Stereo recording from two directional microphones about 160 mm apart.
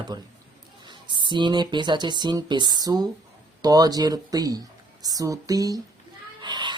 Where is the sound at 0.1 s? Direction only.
25° right (ahead or behind).